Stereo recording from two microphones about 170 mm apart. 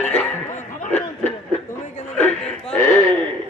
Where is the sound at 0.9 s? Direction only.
40° left (ahead or behind).